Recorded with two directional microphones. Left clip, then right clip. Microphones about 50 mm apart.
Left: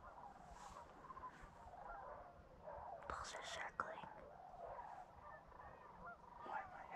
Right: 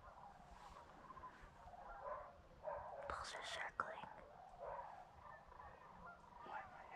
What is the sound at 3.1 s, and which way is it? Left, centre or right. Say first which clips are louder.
Whispering: even; centre.